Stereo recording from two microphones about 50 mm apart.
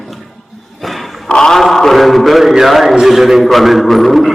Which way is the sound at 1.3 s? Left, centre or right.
Centre.